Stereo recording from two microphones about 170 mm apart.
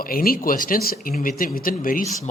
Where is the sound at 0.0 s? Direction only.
60° left (ahead or behind).